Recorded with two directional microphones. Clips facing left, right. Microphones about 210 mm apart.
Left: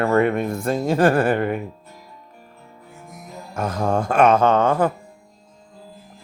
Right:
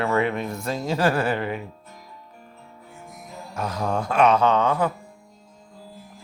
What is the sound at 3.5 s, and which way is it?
Speech, 50° left (ahead or behind).